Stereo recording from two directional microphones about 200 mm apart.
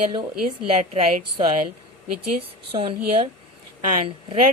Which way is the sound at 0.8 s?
35° right (ahead or behind).